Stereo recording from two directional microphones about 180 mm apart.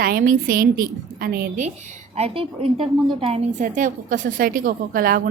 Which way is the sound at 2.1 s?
35° right (ahead or behind).